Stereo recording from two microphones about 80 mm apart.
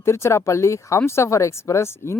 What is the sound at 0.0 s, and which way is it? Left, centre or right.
Speech, left.